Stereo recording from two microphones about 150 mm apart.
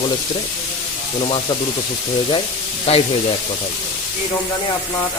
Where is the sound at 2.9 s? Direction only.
45° left (ahead or behind).